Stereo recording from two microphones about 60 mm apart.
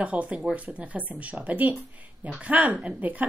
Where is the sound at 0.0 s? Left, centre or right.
Right.